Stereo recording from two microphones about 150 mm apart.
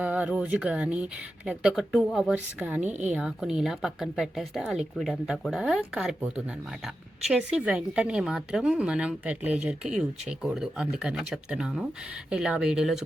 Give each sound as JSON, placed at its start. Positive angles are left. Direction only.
{"t": 0.0, "sound": "a woman's voice", "side_deg": -10}